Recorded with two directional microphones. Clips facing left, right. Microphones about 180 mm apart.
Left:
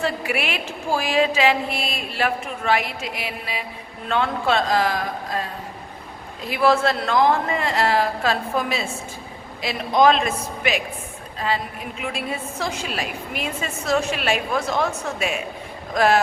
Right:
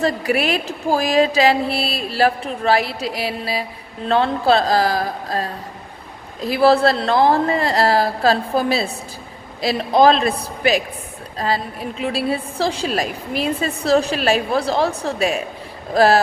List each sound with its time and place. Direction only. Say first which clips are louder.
0.0 s a woman's voice: right 5 dB; 40° right (ahead or behind)